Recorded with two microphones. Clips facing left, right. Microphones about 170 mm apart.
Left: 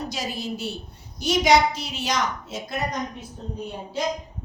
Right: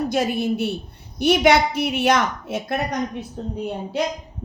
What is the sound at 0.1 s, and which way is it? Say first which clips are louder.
Speech: right 9 dB; 55° right (ahead or behind).